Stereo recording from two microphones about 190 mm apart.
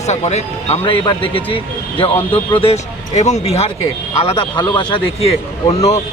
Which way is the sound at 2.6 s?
35° left (ahead or behind).